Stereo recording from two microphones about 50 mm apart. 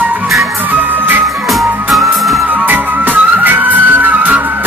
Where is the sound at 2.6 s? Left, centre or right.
Right.